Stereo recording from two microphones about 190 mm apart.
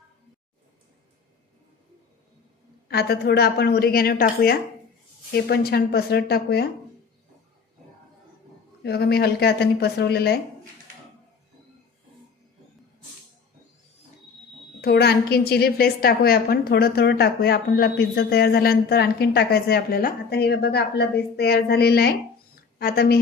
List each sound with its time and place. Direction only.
2.9 s a woman's voice: 55° left (ahead or behind)
8.8 s a woman's voice: 55° left (ahead or behind)
14.8 s a woman's voice: 55° left (ahead or behind)